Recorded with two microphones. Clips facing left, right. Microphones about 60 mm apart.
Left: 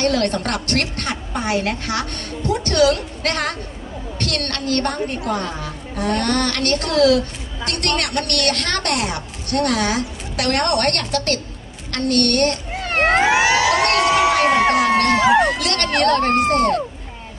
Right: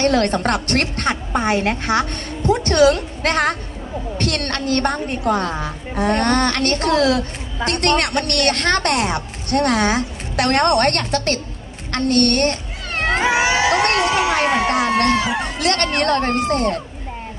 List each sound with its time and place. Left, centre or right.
0.0 s a woman's voice: right
12.7 s cat: left
13.6 s a sound: right
15.0 s crowd: left
15.6 s a woman's voice: right
16.5 s speech: left